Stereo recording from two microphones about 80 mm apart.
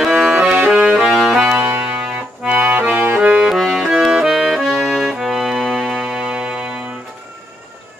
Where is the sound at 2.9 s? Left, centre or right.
Centre.